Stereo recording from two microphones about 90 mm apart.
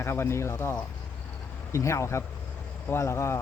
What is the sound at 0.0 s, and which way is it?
Speech, 30° left (ahead or behind).